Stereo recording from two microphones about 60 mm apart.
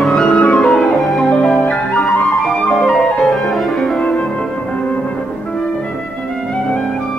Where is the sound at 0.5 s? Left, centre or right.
Centre.